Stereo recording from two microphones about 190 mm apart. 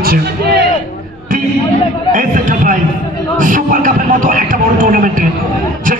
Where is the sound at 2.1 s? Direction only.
45° right (ahead or behind).